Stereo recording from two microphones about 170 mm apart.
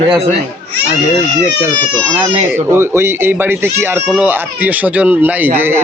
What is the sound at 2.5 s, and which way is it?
A man's voice, 15° right (ahead or behind).